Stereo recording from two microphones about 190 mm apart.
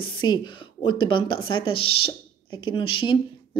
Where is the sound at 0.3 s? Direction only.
25° left (ahead or behind).